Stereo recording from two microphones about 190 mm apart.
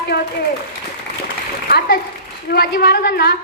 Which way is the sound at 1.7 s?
55° left (ahead or behind).